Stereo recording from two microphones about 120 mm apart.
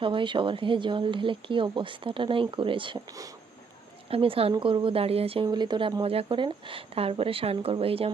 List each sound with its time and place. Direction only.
0.0 s speech: 45° right (ahead or behind)
3.1 s speech: 30° right (ahead or behind)
4.1 s speech: 50° right (ahead or behind)
5.5 s speech: 40° right (ahead or behind)